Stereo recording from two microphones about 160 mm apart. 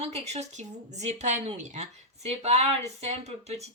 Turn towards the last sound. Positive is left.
turn(degrees=-40)  # may be behind; listen again after turning